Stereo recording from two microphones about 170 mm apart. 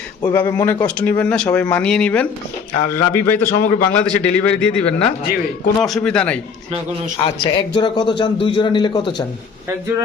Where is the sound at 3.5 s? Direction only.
55° left (ahead or behind).